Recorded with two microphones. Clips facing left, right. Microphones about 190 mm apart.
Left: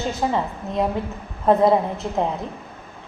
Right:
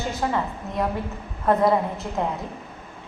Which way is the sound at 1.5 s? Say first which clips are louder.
Left 4 dB; 25° left (ahead or behind).